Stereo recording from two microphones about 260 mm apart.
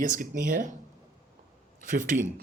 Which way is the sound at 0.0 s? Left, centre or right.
Right.